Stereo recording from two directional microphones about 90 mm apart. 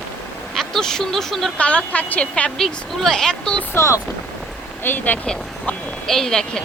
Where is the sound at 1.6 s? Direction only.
15° left (ahead or behind).